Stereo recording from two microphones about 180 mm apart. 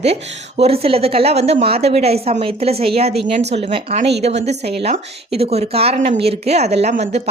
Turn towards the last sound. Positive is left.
turn(degrees=-35)  # may be behind; listen again after turning